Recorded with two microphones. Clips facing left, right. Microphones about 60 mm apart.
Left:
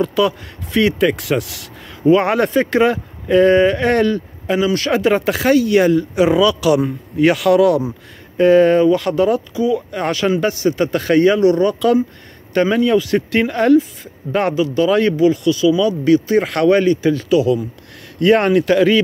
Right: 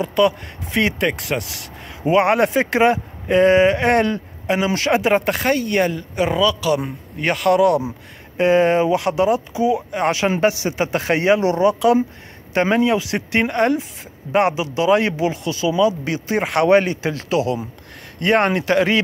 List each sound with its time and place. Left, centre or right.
0.0 s speech: centre
6.8 s speech: centre
9.5 s speech: right
12.5 s speech: right
12.8 s speech: centre
15.1 s speech: right
18.7 s speech: centre